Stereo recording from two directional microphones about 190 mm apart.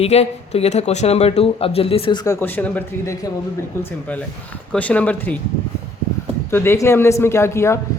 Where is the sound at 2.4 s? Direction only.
10° left (ahead or behind).